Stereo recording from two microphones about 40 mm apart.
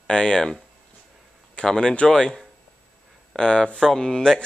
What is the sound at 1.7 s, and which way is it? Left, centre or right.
Speech, centre.